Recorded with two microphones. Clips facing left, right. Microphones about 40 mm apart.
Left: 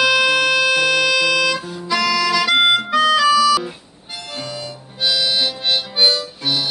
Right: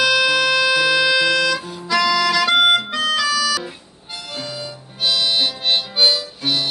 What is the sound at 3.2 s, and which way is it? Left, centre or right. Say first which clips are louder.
Music: left 6 dB; centre.